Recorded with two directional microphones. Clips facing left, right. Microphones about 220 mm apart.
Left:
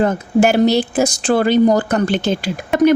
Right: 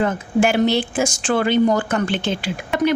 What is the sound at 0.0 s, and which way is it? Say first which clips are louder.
Speech: left 4 dB; 40° left (ahead or behind).